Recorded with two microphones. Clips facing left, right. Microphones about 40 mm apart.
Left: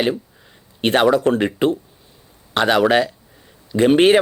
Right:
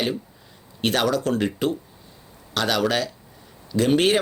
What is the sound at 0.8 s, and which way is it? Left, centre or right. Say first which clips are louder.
Speech: left 7 dB; left.